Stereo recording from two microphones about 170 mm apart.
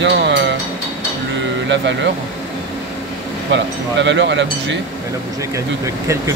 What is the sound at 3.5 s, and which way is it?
Speech, 90° right.